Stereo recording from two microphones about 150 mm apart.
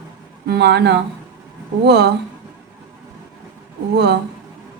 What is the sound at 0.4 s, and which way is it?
Speech, 90° right.